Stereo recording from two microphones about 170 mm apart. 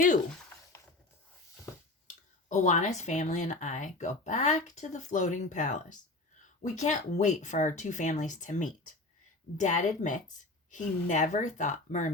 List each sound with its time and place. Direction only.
2.5 s speech: 45° left (ahead or behind)